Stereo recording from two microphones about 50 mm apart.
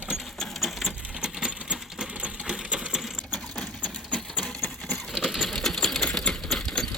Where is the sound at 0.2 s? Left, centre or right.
Centre.